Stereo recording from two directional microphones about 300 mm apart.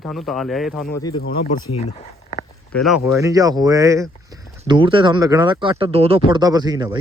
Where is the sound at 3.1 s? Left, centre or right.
Centre.